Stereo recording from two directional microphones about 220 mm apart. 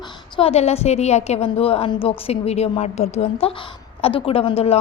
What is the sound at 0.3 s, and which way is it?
A woman's voice, 25° left (ahead or behind).